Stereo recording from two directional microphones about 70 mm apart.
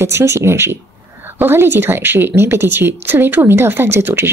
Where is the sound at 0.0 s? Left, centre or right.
Right.